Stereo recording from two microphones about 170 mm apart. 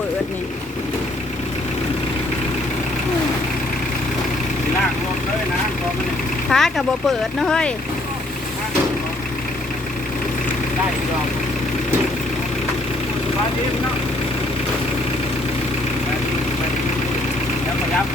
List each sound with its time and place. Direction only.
6.5 s speech: centre (ahead or behind)